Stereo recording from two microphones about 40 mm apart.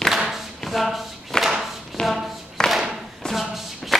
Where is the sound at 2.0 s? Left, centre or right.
Left.